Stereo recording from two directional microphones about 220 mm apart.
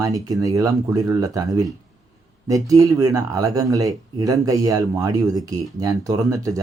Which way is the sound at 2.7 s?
15° right (ahead or behind).